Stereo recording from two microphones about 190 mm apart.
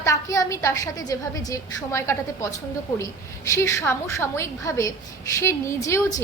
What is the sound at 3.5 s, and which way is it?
A woman's voice, 15° left (ahead or behind).